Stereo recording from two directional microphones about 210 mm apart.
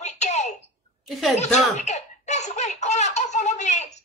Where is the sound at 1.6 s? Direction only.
30° left (ahead or behind).